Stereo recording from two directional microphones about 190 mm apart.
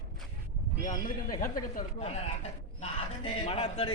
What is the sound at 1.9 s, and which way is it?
Speech, 35° left (ahead or behind).